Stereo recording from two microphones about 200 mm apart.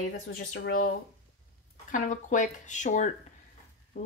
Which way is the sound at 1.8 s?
40° left (ahead or behind).